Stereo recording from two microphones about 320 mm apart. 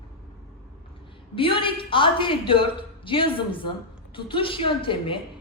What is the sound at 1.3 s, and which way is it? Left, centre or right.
A woman's voice, centre.